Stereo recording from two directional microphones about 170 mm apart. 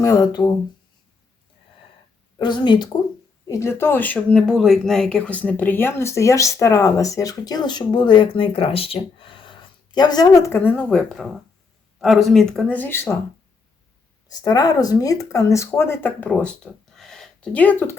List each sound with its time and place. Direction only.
0.0 s speech: 20° left (ahead or behind)
2.4 s speech: 25° left (ahead or behind)
14.3 s speech: 20° left (ahead or behind)